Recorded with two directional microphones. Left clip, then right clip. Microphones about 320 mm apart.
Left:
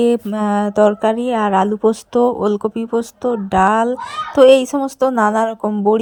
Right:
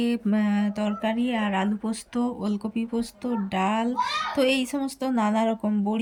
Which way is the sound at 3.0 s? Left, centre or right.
Centre.